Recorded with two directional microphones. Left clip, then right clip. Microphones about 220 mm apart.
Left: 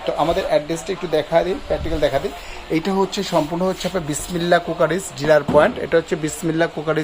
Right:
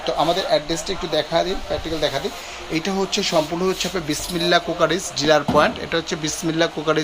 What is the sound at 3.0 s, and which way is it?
Speech, 25° left (ahead or behind).